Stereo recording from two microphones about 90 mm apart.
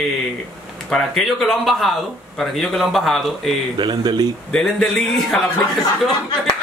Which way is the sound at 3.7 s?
55° right (ahead or behind).